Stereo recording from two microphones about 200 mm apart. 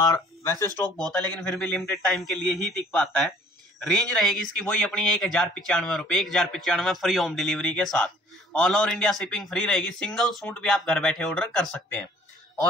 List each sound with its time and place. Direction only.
0.0 s speech: 15° left (ahead or behind)
1.0 s a man's voice: 5° left (ahead or behind)